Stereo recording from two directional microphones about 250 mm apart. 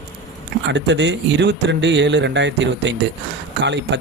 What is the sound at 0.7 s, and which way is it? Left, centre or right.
A man's voice, right.